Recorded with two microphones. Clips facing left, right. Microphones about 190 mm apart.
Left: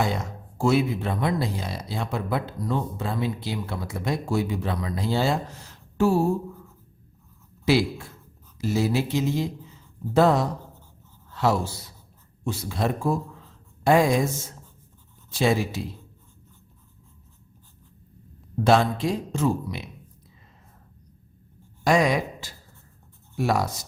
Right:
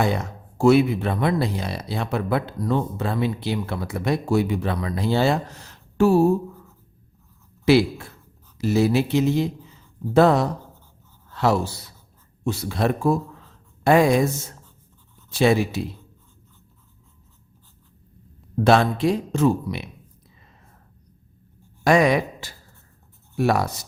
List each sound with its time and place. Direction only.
0.0 s speech: 60° right (ahead or behind)
7.6 s speech: 65° right (ahead or behind)
18.6 s speech: 65° right (ahead or behind)
21.8 s speech: 60° right (ahead or behind)